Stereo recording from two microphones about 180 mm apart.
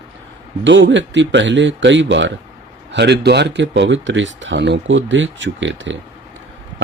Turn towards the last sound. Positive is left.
turn(degrees=-90)